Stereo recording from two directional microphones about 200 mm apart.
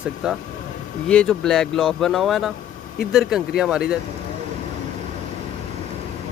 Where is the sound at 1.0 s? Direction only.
5° left (ahead or behind).